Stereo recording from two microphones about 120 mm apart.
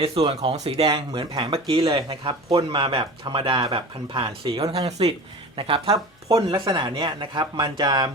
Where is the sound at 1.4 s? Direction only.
50° right (ahead or behind).